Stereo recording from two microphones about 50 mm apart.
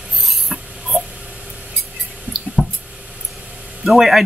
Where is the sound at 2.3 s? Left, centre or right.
Right.